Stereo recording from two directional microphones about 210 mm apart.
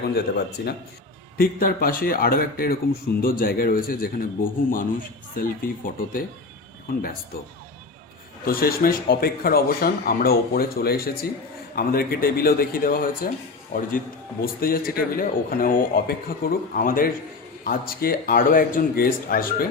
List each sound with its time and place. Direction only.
0.0 s speech: 50° left (ahead or behind)
8.4 s speech: 45° left (ahead or behind)
14.4 s speech: 45° left (ahead or behind)